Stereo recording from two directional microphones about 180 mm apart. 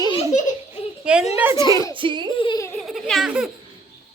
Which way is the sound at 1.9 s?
25° right (ahead or behind).